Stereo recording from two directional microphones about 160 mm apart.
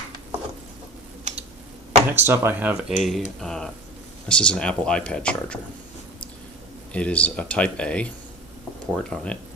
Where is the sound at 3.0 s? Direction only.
Centre (ahead or behind).